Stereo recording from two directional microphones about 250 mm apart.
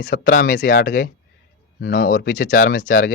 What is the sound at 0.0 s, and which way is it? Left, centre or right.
Speech, left.